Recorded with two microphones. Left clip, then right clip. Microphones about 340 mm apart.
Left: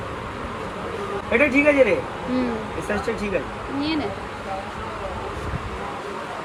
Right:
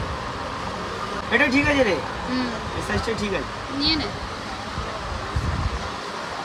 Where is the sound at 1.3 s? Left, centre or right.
Right.